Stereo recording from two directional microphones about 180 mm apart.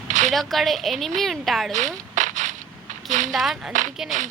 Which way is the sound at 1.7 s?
45° right (ahead or behind).